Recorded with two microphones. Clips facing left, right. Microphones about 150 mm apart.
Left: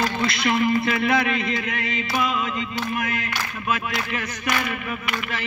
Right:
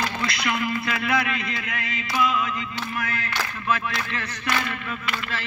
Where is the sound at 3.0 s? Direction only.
20° left (ahead or behind).